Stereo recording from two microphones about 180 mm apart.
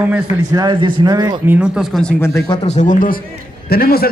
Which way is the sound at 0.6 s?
25° right (ahead or behind).